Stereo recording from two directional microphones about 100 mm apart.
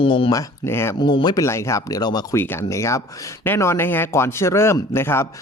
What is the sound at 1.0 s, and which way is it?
Speech, 50° left (ahead or behind).